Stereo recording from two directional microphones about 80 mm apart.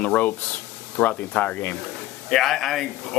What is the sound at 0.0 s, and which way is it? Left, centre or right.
Speech, centre.